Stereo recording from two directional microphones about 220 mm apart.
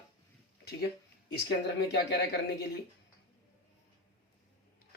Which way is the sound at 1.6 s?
50° left (ahead or behind).